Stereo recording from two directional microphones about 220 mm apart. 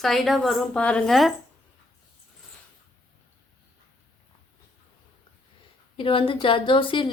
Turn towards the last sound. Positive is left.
turn(degrees=25)  # may be behind; listen again after turning